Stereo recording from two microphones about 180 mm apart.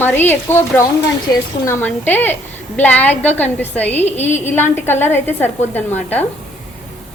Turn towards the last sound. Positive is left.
turn(degrees=10)  # may be behind; listen again after turning